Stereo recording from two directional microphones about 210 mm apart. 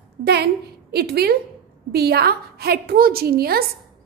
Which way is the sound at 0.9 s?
50° right (ahead or behind).